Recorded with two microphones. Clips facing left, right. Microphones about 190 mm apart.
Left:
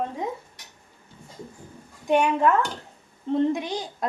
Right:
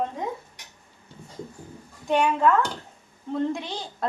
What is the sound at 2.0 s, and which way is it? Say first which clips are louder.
A woman's voice: left 1 dB; 15° left (ahead or behind).